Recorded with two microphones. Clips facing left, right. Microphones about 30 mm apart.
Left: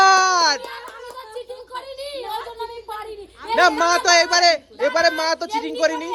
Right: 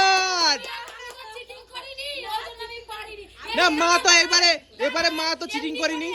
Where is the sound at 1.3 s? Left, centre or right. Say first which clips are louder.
Left 6 dB; right.